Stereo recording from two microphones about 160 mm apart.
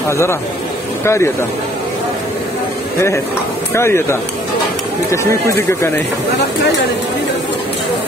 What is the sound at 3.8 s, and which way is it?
Speech, 15° left (ahead or behind).